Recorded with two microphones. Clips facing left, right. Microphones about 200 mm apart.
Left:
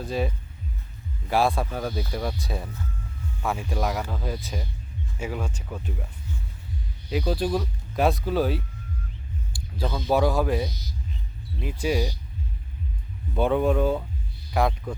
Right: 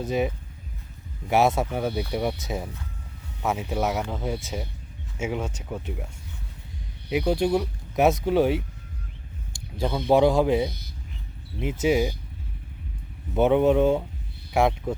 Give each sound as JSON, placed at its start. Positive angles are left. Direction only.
{"t": 0.0, "sound": "speech", "side_deg": -20}
{"t": 7.1, "sound": "speech", "side_deg": -15}
{"t": 10.1, "sound": "speech", "side_deg": -20}
{"t": 10.7, "sound": "a sound", "side_deg": -60}
{"t": 11.6, "sound": "speech", "side_deg": -20}
{"t": 13.3, "sound": "speech", "side_deg": -20}